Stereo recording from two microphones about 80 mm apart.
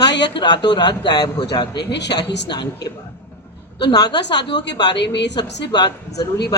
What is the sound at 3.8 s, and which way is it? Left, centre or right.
A woman's voice, left.